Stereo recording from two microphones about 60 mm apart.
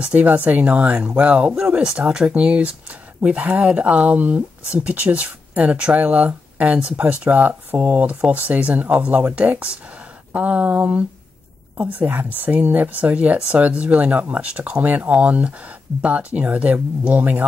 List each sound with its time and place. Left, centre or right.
0.0 s speech: right